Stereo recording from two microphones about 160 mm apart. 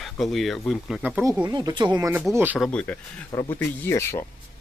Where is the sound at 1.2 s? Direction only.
25° right (ahead or behind).